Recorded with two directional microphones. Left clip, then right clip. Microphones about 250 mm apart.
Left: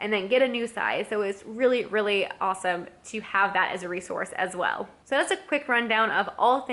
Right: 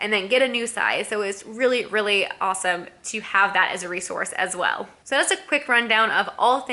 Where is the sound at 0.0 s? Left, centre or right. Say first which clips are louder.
Right 3 dB; centre.